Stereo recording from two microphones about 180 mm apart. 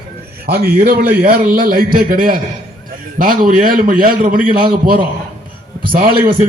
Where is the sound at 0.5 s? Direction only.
60° right (ahead or behind).